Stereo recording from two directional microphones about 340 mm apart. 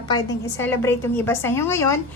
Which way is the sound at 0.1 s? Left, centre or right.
Centre.